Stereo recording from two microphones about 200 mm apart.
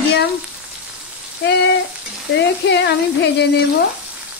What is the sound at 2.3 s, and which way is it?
Speech, 60° left (ahead or behind).